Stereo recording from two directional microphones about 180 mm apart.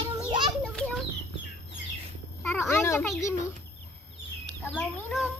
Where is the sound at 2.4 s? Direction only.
10° left (ahead or behind).